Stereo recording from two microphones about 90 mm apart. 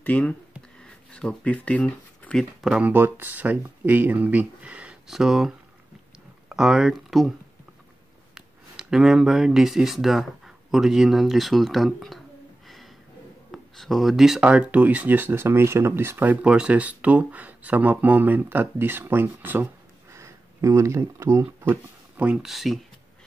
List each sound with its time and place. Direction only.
0.0 s a sound: 15° left (ahead or behind)
2.8 s speech: 20° right (ahead or behind); by 5.5 s 5° right (ahead or behind)
6.5 s speech: 5° right (ahead or behind)
8.4 s speech: 5° right (ahead or behind)
12.6 s a sound: centre (ahead or behind)
13.5 s speech: centre (ahead or behind); by 19.7 s 20° right (ahead or behind)
20.1 s speech: 35° right (ahead or behind)
22.1 s speech: 15° right (ahead or behind)
22.5 s speech: centre (ahead or behind)